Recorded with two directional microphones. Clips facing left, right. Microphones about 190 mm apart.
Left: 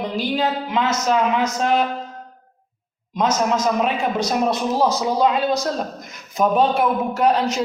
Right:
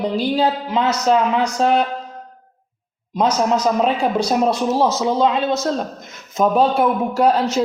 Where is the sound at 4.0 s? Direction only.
30° right (ahead or behind).